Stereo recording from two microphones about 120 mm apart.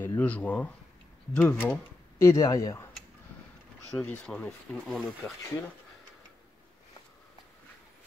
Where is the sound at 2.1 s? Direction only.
25° left (ahead or behind).